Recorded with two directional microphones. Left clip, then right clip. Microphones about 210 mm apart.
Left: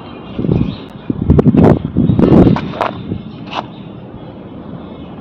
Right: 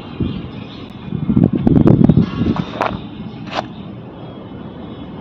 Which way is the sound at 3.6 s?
20° right (ahead or behind).